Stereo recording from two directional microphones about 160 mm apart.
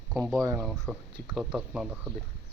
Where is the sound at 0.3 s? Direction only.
Centre (ahead or behind).